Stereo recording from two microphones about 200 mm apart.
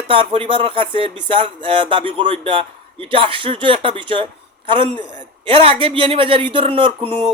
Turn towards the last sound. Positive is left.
turn(degrees=-30)  # may be behind; listen again after turning